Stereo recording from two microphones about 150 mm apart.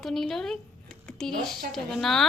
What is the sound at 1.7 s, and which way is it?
Speech, centre (ahead or behind).